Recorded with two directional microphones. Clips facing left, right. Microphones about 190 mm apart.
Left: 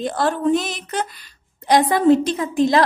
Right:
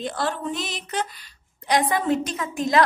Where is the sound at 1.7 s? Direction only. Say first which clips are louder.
Left 7 dB; 35° left (ahead or behind).